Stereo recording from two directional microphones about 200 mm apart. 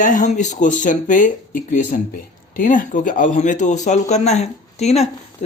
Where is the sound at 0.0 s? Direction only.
40° left (ahead or behind).